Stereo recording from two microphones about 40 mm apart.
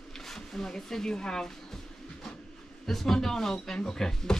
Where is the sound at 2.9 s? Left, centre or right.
Centre.